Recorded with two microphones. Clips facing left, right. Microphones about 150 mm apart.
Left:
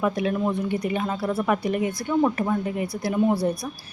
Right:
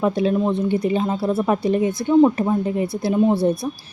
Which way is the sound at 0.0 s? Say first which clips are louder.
Right 5 dB; 30° right (ahead or behind).